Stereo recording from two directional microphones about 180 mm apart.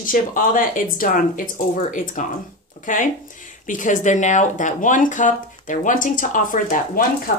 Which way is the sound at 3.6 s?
45° left (ahead or behind).